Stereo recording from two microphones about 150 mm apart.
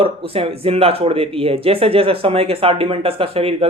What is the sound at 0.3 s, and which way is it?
Speech, 40° right (ahead or behind).